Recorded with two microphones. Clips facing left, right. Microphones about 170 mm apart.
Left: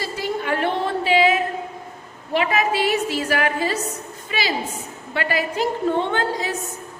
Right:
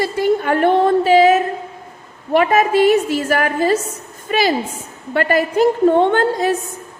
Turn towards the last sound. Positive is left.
turn(degrees=-55)  # may be behind; listen again after turning